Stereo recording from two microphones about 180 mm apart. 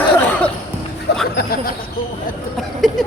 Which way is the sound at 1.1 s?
60° left (ahead or behind).